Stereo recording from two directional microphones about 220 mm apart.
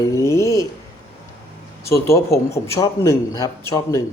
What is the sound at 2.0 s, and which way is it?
A man's voice, 15° left (ahead or behind).